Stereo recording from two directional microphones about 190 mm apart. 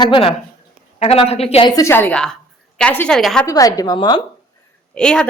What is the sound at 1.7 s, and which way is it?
A woman's voice, 15° left (ahead or behind).